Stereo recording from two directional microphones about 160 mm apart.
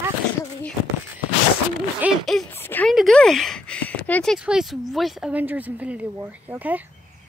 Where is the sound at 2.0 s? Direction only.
10° right (ahead or behind).